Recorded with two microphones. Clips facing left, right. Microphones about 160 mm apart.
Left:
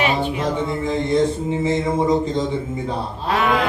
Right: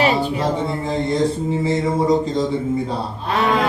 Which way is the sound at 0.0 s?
35° right (ahead or behind).